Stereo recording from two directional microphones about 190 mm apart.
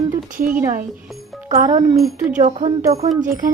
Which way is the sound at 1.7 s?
20° right (ahead or behind).